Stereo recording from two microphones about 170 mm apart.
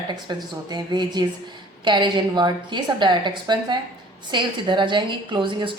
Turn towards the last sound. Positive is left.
turn(degrees=-30)  # may be behind; listen again after turning